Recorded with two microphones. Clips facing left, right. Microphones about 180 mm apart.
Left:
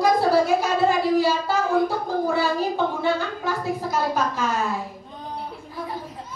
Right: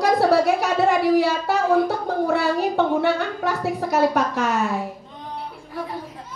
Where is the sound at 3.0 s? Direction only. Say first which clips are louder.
Right 3 dB; 70° right (ahead or behind).